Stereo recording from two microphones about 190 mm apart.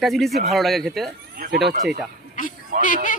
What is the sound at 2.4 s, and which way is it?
Speech, 45° left (ahead or behind).